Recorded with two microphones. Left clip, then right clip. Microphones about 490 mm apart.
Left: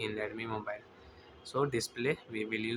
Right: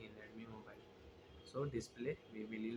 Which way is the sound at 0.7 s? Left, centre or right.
Centre.